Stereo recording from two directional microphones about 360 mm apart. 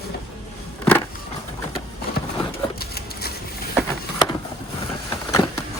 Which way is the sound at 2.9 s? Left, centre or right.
Left.